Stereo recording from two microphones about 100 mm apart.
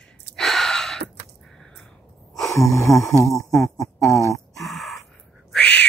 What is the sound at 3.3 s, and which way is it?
Speech, 30° left (ahead or behind).